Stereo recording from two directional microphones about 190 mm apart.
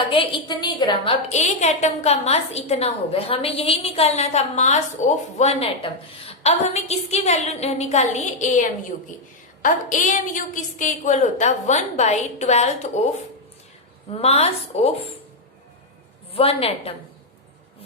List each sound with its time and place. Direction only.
0.1 s a woman's voice: 25° left (ahead or behind)
1.3 s a woman's voice: 35° left (ahead or behind)
14.1 s a woman's voice: 30° left (ahead or behind)
16.3 s a woman's voice: 30° left (ahead or behind)